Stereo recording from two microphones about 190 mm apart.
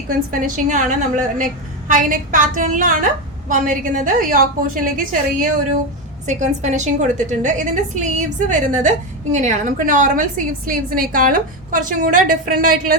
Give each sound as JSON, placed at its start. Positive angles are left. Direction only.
{"t": 0.3, "sound": "a woman's voice", "side_deg": -45}